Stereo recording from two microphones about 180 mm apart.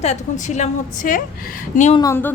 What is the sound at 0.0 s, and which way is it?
A woman's voice, 40° left (ahead or behind).